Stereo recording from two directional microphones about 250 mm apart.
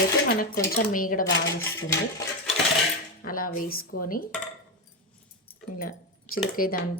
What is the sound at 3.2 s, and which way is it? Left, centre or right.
Speech, left.